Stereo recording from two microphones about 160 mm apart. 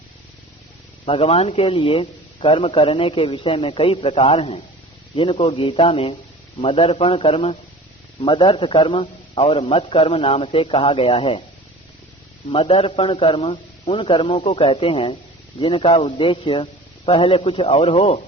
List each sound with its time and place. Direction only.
1.0 s a man's voice: 35° left (ahead or behind)
12.5 s a man's voice: 35° left (ahead or behind)